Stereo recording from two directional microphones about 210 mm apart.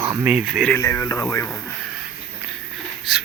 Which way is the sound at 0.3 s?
5° right (ahead or behind).